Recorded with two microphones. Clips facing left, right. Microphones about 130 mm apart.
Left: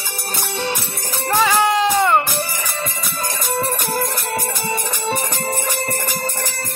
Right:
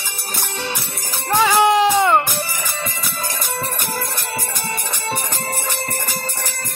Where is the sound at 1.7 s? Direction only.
20° right (ahead or behind).